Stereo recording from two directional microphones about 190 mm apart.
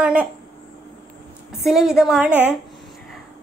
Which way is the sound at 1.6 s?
Centre (ahead or behind).